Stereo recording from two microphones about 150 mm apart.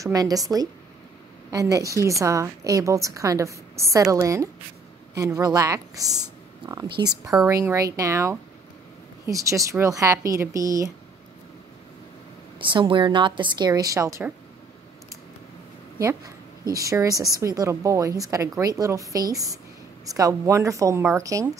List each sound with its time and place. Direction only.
0.0 s a woman's voice: 25° right (ahead or behind)
12.5 s a woman's voice: 35° right (ahead or behind)
16.7 s a woman's voice: 20° right (ahead or behind)